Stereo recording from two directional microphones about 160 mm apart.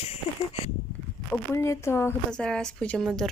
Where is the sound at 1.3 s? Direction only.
15° left (ahead or behind).